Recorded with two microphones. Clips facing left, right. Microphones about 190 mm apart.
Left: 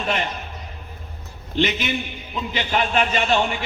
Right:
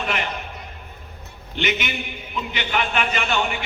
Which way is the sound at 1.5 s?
30° left (ahead or behind).